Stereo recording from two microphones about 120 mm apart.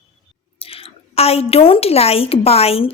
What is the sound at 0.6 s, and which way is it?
A woman's voice, 50° left (ahead or behind).